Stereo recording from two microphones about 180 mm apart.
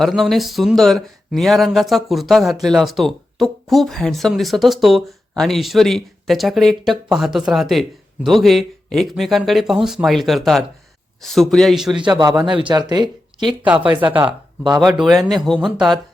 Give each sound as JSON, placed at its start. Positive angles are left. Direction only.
{"t": 0.0, "sound": "speech", "side_deg": 0}
{"t": 11.9, "sound": "speech", "side_deg": -25}
{"t": 14.0, "sound": "speech", "side_deg": -10}
{"t": 14.3, "sound": "speech", "side_deg": -25}
{"t": 14.8, "sound": "speech", "side_deg": 0}